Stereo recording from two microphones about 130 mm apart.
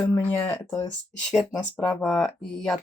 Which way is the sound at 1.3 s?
Centre (ahead or behind).